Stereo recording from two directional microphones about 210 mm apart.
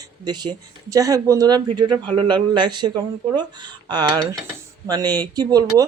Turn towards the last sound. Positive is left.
turn(degrees=-20)  # may be behind; listen again after turning